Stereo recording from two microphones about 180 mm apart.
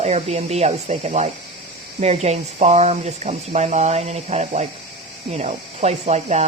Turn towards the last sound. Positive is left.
turn(degrees=-40)  # may be behind; listen again after turning